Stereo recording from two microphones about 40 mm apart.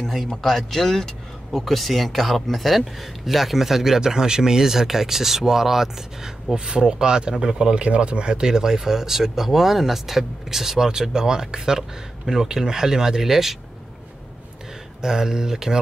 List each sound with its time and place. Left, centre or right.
0.4 s speech: centre
6.5 s speech: right
15.0 s speech: centre